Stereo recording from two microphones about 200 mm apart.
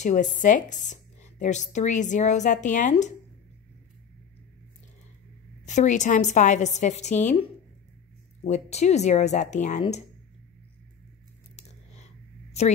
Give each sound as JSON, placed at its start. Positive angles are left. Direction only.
{"t": 0.0, "sound": "speech", "side_deg": 40}
{"t": 5.7, "sound": "speech", "side_deg": 35}
{"t": 11.5, "sound": "a sound", "side_deg": 35}